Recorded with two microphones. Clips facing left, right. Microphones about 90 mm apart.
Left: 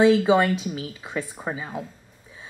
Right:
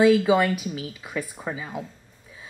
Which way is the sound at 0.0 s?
25° left (ahead or behind).